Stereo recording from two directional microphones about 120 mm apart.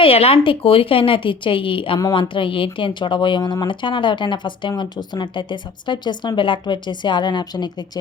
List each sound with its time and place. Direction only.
0.0 s a woman's voice: 55° left (ahead or behind); by 7.9 s 35° left (ahead or behind)